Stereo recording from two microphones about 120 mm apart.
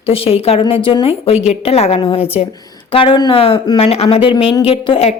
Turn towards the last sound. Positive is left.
turn(degrees=55)  # may be behind; listen again after turning